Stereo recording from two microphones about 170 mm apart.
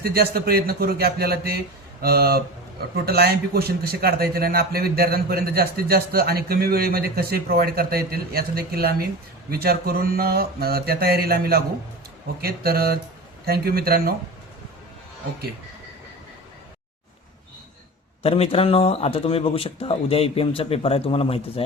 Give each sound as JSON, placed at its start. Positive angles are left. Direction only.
{"t": 0.0, "sound": "a man's voice", "side_deg": -65}
{"t": 18.2, "sound": "speech", "side_deg": 35}